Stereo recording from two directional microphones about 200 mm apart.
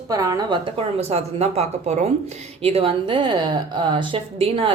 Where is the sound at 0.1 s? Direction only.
15° right (ahead or behind).